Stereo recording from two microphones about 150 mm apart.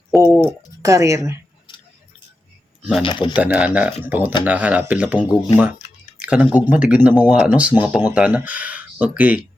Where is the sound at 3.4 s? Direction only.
10° right (ahead or behind).